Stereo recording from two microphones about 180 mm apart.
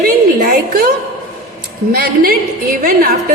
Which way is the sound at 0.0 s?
50° right (ahead or behind).